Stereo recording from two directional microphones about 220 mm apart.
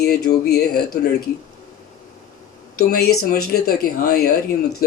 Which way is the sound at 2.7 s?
45° left (ahead or behind).